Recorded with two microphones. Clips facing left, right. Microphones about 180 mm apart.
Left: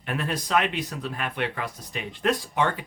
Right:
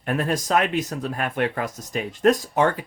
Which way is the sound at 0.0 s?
45° right (ahead or behind).